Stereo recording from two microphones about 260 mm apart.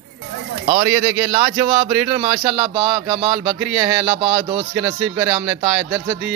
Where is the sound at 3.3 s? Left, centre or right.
Centre.